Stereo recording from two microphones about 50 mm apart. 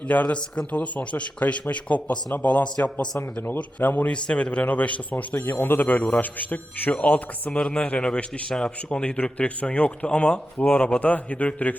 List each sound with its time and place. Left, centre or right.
0.1 s speech: left
4.1 s speech: left
5.3 s speech: left
10.6 s speech: left